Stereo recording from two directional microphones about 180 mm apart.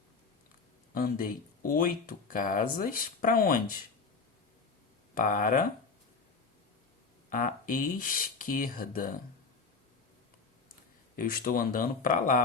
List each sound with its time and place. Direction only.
0.9 s speech: 50° left (ahead or behind)
5.1 s speech: 50° left (ahead or behind)
7.3 s speech: 50° left (ahead or behind)
11.2 s speech: 50° left (ahead or behind)